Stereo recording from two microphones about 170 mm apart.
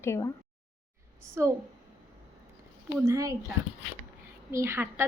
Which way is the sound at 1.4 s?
15° right (ahead or behind).